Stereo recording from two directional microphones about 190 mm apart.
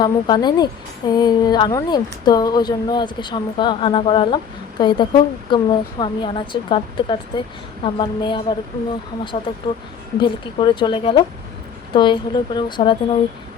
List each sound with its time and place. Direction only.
0.0 s a woman's voice: 20° left (ahead or behind)